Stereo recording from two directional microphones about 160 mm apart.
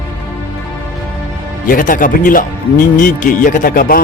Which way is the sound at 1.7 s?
60° left (ahead or behind).